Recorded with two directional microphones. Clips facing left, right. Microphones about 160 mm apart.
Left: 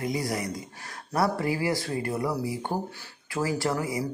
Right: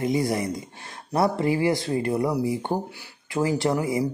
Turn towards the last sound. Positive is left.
turn(degrees=-20)  # may be behind; listen again after turning